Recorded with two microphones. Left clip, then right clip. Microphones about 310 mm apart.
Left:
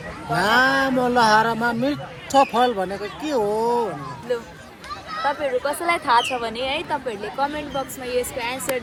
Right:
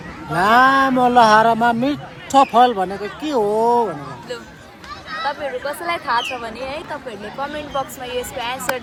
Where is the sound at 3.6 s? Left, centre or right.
Right.